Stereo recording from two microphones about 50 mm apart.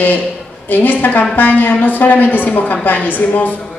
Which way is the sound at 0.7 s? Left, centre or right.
Left.